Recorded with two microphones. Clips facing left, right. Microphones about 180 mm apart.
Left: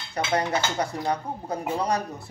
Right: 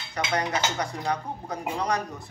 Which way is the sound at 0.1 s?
30° left (ahead or behind).